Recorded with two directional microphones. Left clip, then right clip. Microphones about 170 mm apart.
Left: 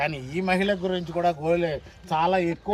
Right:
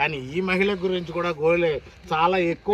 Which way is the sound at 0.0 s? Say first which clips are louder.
Right 3 dB; 30° left (ahead or behind).